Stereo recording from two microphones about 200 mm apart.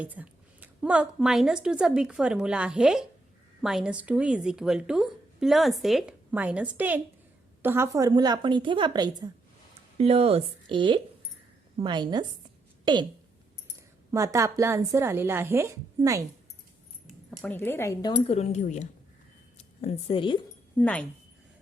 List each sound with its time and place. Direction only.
0.0 s a woman's voice: 10° right (ahead or behind)
14.1 s a woman's voice: 15° right (ahead or behind)
17.1 s speech: 5° left (ahead or behind)
18.3 s speech: 35° left (ahead or behind)
20.7 s speech: 5° left (ahead or behind)